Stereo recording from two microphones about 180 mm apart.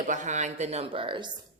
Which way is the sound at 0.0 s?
45° right (ahead or behind).